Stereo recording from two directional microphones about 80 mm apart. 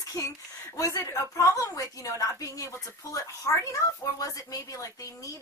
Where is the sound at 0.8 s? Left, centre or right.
Left.